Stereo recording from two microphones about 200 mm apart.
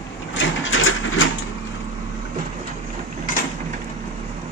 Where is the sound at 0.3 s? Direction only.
70° left (ahead or behind).